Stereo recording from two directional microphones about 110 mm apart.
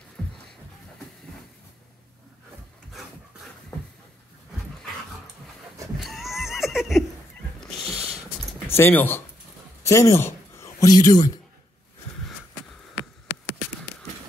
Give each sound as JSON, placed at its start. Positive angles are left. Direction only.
{"t": 0.2, "sound": "music", "side_deg": 5}
{"t": 5.9, "sound": "a sound", "side_deg": 0}
{"t": 7.6, "sound": "cat", "side_deg": 0}
{"t": 8.6, "sound": "speech", "side_deg": 20}